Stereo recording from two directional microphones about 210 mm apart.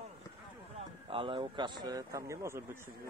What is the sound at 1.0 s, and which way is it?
A man's voice, 25° right (ahead or behind).